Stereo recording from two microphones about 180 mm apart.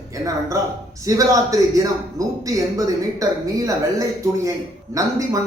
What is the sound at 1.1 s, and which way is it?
A man's voice, 20° right (ahead or behind).